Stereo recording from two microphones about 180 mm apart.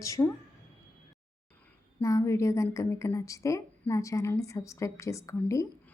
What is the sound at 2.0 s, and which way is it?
A woman's voice, 15° left (ahead or behind).